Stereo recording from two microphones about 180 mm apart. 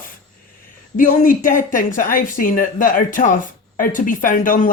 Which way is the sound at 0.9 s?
50° left (ahead or behind).